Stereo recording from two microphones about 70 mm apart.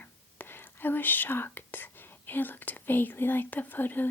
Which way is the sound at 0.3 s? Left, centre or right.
Left.